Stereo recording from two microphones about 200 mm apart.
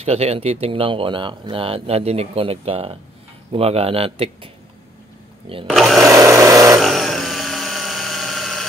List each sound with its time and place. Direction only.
0.0 s speech: 30° right (ahead or behind)
5.7 s speech: centre (ahead or behind)
6.0 s wood: 15° right (ahead or behind)
6.8 s engine: centre (ahead or behind)